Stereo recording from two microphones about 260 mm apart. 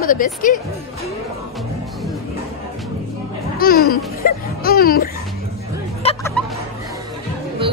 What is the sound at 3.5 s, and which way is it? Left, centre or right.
Music, left.